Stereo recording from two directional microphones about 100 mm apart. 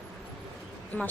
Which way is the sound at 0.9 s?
15° left (ahead or behind).